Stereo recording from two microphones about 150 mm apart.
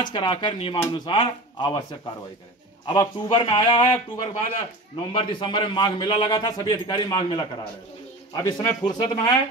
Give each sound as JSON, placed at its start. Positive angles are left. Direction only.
{"t": 0.1, "sound": "a man's voice", "side_deg": 30}